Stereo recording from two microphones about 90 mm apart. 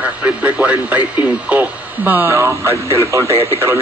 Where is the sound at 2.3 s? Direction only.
35° right (ahead or behind).